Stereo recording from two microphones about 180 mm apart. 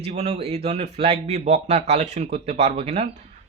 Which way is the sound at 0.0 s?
40° right (ahead or behind).